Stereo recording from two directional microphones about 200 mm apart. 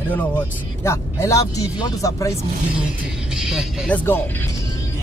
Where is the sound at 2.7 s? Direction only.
5° right (ahead or behind); by 4.9 s 15° left (ahead or behind).